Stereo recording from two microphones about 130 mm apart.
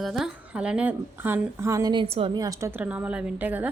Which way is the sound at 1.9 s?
45° right (ahead or behind).